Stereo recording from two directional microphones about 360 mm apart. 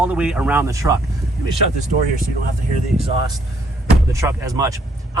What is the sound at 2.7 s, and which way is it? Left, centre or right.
A man's voice, centre.